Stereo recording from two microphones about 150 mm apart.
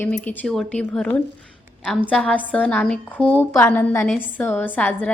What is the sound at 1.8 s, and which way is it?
Speech, 5° right (ahead or behind).